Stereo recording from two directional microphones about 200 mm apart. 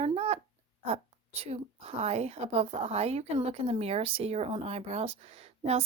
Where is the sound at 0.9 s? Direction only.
30° right (ahead or behind).